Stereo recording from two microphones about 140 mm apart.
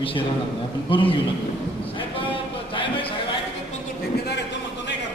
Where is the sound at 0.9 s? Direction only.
40° left (ahead or behind).